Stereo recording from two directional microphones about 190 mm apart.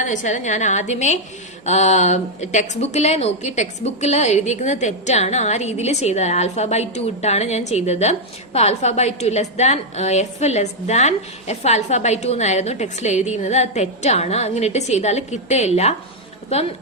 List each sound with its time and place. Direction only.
0.0 s a woman's voice: 40° left (ahead or behind)